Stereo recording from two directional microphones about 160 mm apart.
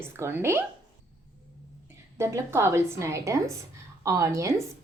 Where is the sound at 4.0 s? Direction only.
20° right (ahead or behind).